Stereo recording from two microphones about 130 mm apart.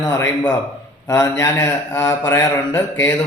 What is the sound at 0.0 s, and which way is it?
A man's voice, 20° left (ahead or behind).